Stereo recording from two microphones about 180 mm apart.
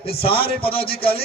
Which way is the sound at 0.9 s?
60° left (ahead or behind).